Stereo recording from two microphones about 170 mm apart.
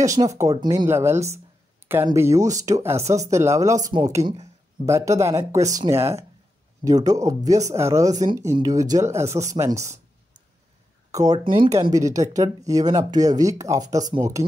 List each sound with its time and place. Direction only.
0.0 s speech: 20° right (ahead or behind)
11.1 s speech: 20° right (ahead or behind)